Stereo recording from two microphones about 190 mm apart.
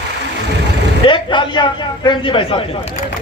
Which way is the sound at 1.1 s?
25° left (ahead or behind).